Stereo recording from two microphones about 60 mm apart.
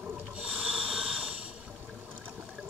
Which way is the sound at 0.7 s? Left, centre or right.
Centre.